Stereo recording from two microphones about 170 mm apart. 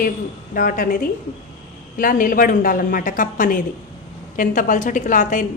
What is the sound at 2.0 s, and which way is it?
A woman's voice, 55° left (ahead or behind).